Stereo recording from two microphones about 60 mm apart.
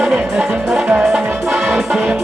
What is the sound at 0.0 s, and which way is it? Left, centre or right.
Music, centre.